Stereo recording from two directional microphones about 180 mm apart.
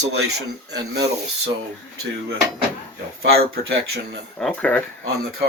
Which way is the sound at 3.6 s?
60° right (ahead or behind).